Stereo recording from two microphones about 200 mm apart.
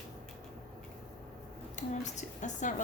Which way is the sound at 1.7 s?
35° left (ahead or behind).